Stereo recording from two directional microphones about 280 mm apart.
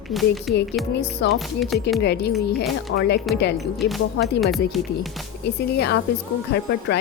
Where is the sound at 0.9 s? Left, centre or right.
Left.